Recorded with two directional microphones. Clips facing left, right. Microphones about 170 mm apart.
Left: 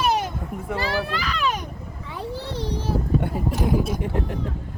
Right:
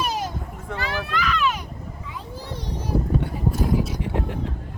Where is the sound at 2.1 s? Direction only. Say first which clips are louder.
Left 7 dB; 80° left.